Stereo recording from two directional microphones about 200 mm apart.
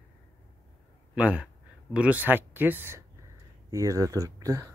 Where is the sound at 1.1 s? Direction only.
5° right (ahead or behind).